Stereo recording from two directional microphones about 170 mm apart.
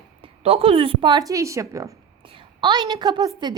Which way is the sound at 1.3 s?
20° right (ahead or behind).